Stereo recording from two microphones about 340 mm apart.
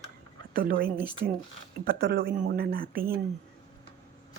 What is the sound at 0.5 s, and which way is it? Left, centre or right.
Speech, right.